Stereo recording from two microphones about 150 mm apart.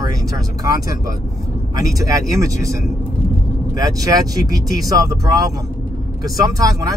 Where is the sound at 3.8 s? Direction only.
25° right (ahead or behind).